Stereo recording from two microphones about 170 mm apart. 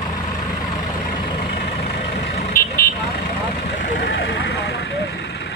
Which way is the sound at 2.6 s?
60° left (ahead or behind).